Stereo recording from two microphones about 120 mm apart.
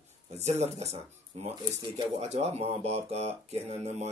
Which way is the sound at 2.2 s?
65° right (ahead or behind).